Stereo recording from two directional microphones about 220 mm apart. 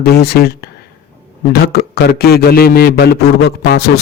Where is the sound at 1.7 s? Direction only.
45° left (ahead or behind).